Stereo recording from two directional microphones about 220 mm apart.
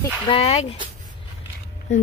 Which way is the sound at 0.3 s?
30° left (ahead or behind).